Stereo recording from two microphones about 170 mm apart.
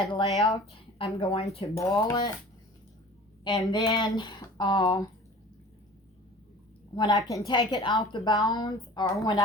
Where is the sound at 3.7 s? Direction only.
25° left (ahead or behind).